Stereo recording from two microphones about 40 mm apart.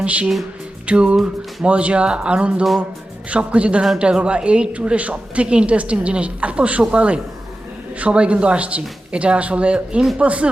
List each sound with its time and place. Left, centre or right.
0.0 s speech: right
0.9 s music: right
1.6 s a woman's voice: right